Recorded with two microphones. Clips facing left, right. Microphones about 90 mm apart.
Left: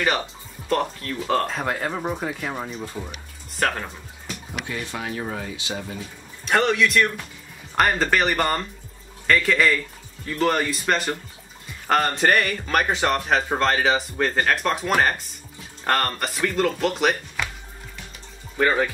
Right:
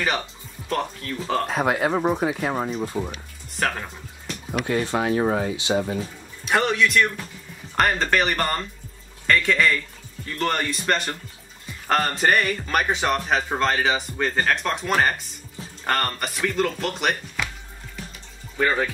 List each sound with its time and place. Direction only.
0.7 s speech: centre (ahead or behind)
1.5 s speech: 10° right (ahead or behind)
3.5 s speech: centre (ahead or behind)
4.6 s speech: 35° right (ahead or behind)
6.4 s speech: centre (ahead or behind)
18.6 s speech: centre (ahead or behind)